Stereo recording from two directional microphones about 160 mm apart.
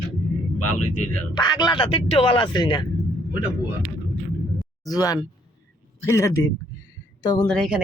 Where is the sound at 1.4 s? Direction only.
25° left (ahead or behind).